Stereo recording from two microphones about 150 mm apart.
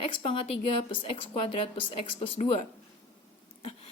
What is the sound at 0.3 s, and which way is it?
A woman's voice, 35° left (ahead or behind).